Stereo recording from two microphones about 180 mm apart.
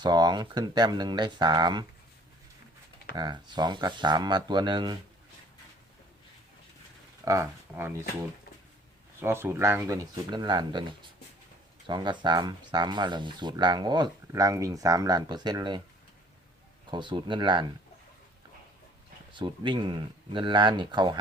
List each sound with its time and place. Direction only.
0.0 s speech: 25° right (ahead or behind)
3.2 s speech: 25° right (ahead or behind)
7.3 s speech: 15° right (ahead or behind)
9.2 s speech: 15° right (ahead or behind)
11.9 s speech: 25° right (ahead or behind)
16.9 s speech: 25° right (ahead or behind)
19.3 s speech: 25° right (ahead or behind)